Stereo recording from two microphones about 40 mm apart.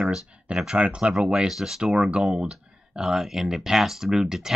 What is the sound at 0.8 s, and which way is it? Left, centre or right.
Speech, right.